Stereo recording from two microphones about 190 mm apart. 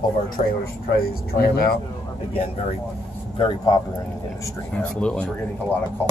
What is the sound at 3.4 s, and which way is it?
Speech, 25° left (ahead or behind).